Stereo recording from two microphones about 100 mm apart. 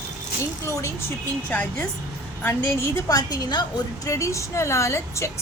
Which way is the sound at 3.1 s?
40° left (ahead or behind).